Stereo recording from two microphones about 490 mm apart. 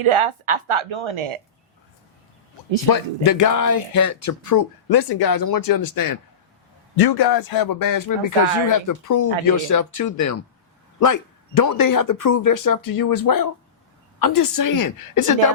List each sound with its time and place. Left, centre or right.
0.0 s speech: right
2.9 s speech: left